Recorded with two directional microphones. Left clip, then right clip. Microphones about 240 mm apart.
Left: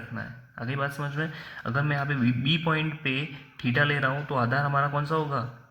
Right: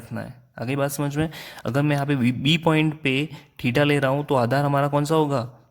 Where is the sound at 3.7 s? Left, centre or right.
Right.